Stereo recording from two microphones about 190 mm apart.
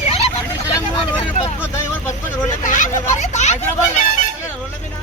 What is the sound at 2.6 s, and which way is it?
Speech, 40° left (ahead or behind).